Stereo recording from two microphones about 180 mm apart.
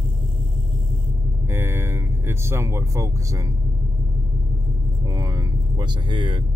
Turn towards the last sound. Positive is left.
turn(degrees=-25)  # may be behind; listen again after turning